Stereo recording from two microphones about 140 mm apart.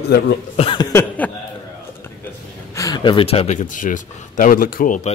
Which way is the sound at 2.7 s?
25° left (ahead or behind).